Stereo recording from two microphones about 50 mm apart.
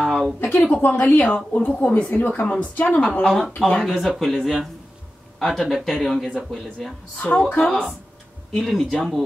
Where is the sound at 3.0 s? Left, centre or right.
Centre.